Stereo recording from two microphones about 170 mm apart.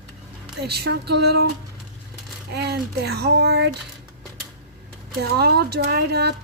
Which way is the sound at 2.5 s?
75° right (ahead or behind).